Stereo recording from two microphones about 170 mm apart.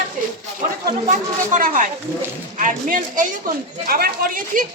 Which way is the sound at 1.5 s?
50° right (ahead or behind).